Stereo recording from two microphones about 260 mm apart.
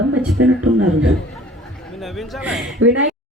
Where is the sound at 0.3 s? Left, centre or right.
Right.